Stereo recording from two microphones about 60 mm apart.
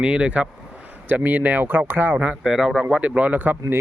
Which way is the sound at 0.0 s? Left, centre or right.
Centre.